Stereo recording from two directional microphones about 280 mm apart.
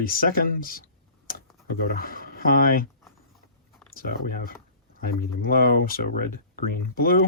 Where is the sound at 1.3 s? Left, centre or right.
Left.